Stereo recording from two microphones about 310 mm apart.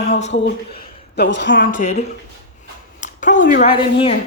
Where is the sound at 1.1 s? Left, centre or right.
Left; by 4.2 s centre.